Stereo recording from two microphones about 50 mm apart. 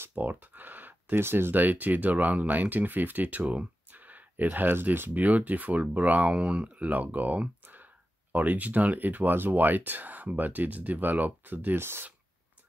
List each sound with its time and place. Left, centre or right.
0.2 s a sound: right
1.2 s speech: right
11.8 s speech: right